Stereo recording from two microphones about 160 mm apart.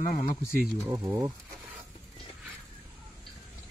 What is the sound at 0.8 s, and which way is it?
Speech, 15° right (ahead or behind).